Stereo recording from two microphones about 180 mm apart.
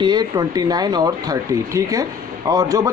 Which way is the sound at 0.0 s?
20° right (ahead or behind).